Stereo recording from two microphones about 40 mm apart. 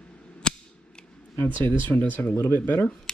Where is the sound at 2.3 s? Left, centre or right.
Left.